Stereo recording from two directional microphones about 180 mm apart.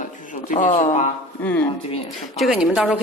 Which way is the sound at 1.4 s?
10° left (ahead or behind).